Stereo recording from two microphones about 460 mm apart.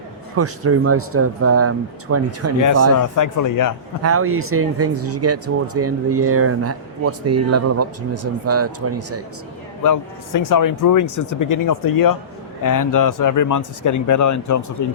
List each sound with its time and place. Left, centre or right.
0.3 s speech: right
2.9 s speech: left
4.0 s speech: right
9.8 s speech: left